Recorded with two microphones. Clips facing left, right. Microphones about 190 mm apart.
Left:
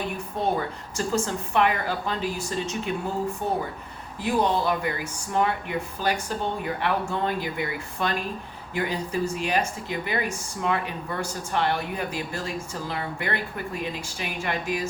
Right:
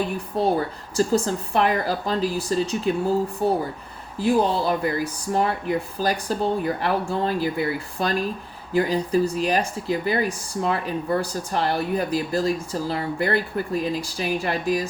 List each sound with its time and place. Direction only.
0.4 s speech: 35° right (ahead or behind)